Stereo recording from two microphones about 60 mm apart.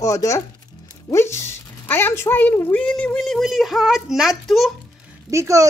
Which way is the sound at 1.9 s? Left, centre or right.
Left.